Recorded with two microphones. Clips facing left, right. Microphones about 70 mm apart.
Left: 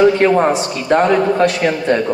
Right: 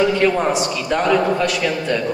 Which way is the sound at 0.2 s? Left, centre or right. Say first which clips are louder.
Left 4 dB; left.